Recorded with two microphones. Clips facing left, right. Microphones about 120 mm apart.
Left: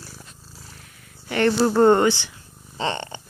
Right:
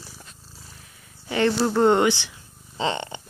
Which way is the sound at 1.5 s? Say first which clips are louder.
Left 4 dB; 10° left (ahead or behind).